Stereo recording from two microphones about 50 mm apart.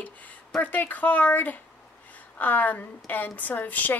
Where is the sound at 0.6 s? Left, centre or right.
Left.